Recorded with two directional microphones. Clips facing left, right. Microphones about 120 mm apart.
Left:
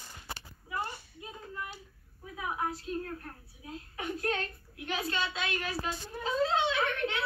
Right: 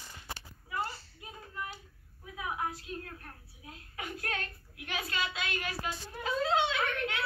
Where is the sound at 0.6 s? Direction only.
15° left (ahead or behind).